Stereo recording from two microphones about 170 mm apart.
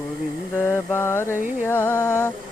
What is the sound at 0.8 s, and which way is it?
Speech, 15° left (ahead or behind).